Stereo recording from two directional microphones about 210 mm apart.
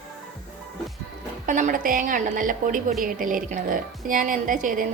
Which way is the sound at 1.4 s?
40° right (ahead or behind).